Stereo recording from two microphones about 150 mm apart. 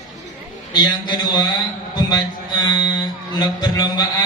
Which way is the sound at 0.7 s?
30° left (ahead or behind).